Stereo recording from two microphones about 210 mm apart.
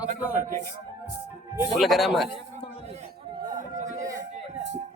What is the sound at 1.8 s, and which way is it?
Speech, centre (ahead or behind).